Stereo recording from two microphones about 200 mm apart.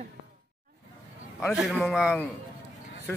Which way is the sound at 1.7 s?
Centre (ahead or behind).